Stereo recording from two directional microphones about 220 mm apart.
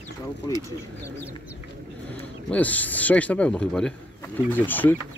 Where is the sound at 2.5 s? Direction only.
5° left (ahead or behind).